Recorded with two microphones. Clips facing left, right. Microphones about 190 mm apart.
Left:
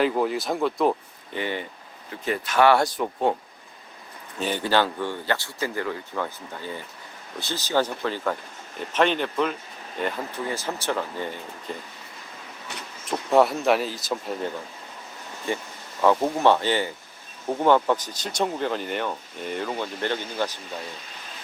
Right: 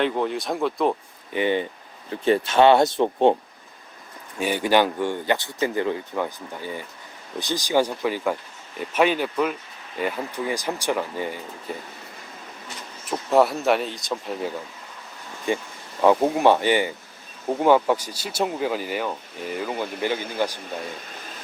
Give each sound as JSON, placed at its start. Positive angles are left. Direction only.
{"t": 0.0, "sound": "speech", "side_deg": 5}
{"t": 1.3, "sound": "speech", "side_deg": -20}
{"t": 2.0, "sound": "speech", "side_deg": -30}
{"t": 4.4, "sound": "speech", "side_deg": -10}
{"t": 13.1, "sound": "speech", "side_deg": 0}
{"t": 15.5, "sound": "speech", "side_deg": -15}